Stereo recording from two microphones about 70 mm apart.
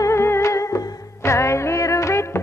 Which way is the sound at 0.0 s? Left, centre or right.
Left.